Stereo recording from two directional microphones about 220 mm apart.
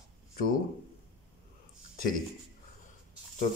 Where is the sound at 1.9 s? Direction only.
40° left (ahead or behind).